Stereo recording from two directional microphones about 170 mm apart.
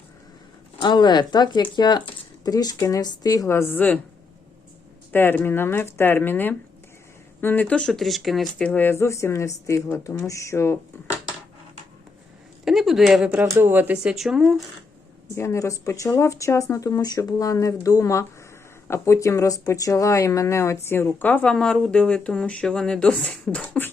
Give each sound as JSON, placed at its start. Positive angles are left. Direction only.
{"t": 0.8, "sound": "speech", "side_deg": 25}
{"t": 5.1, "sound": "speech", "side_deg": 10}
{"t": 12.6, "sound": "speech", "side_deg": 0}
{"t": 15.4, "sound": "speech", "side_deg": 15}